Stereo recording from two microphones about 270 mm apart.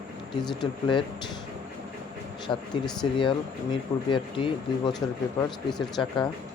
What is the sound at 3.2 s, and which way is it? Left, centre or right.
Speech, centre.